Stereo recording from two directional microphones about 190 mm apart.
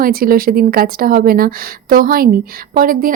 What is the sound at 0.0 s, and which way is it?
A woman's voice, 50° right (ahead or behind).